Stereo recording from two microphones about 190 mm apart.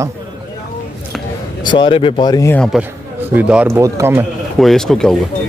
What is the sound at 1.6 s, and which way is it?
Speech, 25° left (ahead or behind).